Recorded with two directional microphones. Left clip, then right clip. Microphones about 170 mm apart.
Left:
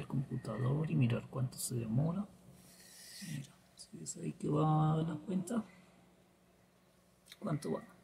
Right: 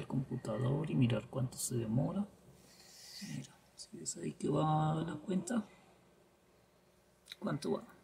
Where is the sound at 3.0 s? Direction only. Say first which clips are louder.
Right 1 dB; centre (ahead or behind).